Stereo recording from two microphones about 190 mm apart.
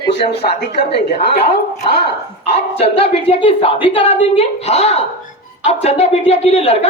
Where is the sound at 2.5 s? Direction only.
30° left (ahead or behind).